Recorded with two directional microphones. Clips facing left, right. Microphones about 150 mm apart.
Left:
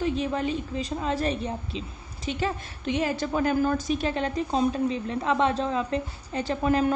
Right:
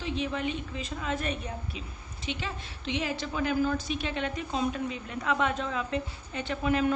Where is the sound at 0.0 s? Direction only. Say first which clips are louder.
Left 5 dB; 40° left (ahead or behind).